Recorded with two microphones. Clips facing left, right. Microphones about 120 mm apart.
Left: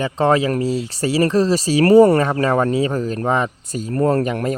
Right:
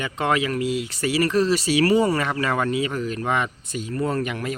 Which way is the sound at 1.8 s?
45° left (ahead or behind).